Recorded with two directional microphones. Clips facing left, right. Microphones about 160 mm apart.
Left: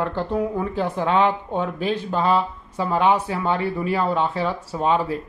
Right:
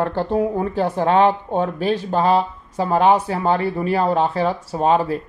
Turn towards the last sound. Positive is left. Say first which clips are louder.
# right 4 dB
turn(degrees=-45)  # may be behind; listen again after turning